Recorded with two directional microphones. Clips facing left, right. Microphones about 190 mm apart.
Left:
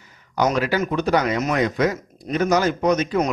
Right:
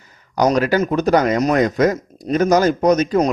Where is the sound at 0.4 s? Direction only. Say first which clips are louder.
Right 5 dB; 45° right (ahead or behind).